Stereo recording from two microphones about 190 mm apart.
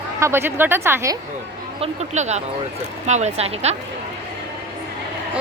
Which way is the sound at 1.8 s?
35° right (ahead or behind).